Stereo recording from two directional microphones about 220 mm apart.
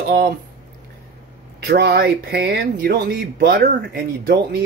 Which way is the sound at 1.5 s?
45° right (ahead or behind).